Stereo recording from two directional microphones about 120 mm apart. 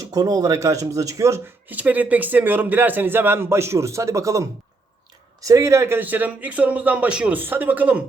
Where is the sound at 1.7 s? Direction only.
15° right (ahead or behind).